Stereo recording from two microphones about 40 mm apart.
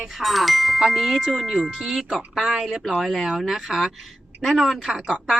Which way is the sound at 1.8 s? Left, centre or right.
Centre.